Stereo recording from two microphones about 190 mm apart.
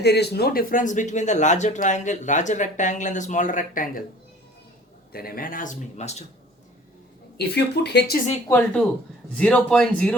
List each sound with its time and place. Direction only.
0.0 s speech: 60° left (ahead or behind)
5.1 s speech: 50° left (ahead or behind); by 6.2 s 35° left (ahead or behind)
7.3 s speech: 60° left (ahead or behind)
8.4 s speech: 10° left (ahead or behind)